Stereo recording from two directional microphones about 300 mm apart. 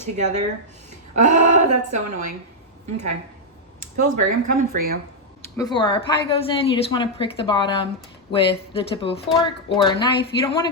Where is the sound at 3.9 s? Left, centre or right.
Right.